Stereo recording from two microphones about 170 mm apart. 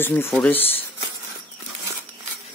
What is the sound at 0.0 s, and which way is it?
Speech, 15° left (ahead or behind).